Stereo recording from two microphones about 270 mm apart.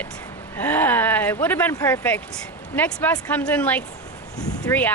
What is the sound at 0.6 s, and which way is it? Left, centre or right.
Speech, centre.